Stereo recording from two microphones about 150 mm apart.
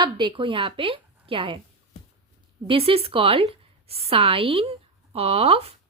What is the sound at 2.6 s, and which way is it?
A woman's voice, 40° right (ahead or behind).